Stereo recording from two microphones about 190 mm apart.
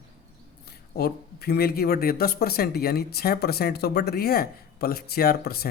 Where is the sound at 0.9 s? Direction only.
55° left (ahead or behind).